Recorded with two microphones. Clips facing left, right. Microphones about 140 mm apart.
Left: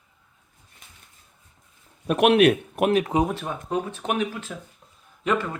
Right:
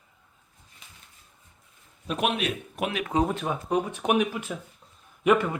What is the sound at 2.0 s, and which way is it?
Speech, 65° left (ahead or behind).